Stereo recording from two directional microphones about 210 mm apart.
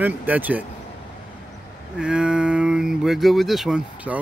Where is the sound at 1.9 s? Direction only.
5° right (ahead or behind).